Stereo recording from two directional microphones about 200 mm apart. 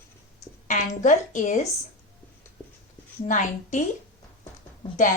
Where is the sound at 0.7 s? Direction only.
40° left (ahead or behind).